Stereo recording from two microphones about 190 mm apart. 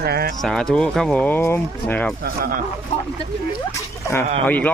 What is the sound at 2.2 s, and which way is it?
Speech, 55° right (ahead or behind).